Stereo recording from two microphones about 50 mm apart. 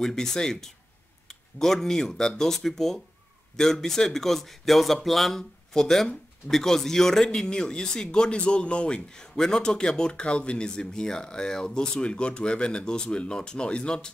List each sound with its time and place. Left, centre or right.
0.0 s speech: centre